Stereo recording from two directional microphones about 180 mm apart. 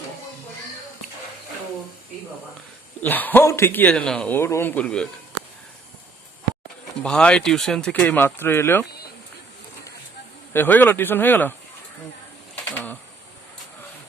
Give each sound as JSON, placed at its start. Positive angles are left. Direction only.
{"t": 3.0, "sound": "a man's voice", "side_deg": 10}
{"t": 7.0, "sound": "speech", "side_deg": 5}
{"t": 10.5, "sound": "a man's voice", "side_deg": 10}
{"t": 12.7, "sound": "a sound", "side_deg": 10}